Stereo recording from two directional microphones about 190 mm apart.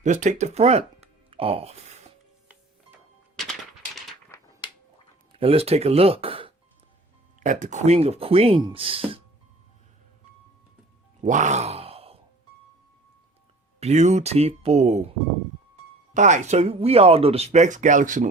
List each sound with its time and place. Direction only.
0.0 s speech: 40° right (ahead or behind)
2.5 s music: 5° right (ahead or behind)
4.3 s a sound: 15° left (ahead or behind)
5.3 s speech: 30° right (ahead or behind)
7.3 s speech: 40° right (ahead or behind)
11.2 s groan: 40° right (ahead or behind)
13.7 s speech: 35° right (ahead or behind)
16.1 s speech: 40° right (ahead or behind)